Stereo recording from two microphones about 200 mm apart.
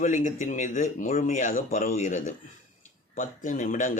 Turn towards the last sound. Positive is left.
turn(degrees=40)  # may be behind; listen again after turning